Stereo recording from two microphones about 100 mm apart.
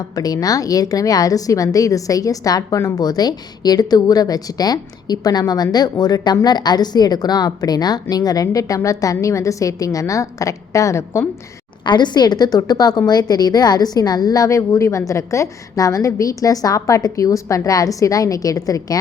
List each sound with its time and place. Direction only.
0.2 s a woman's voice: 40° left (ahead or behind)
11.9 s a woman's voice: 50° left (ahead or behind)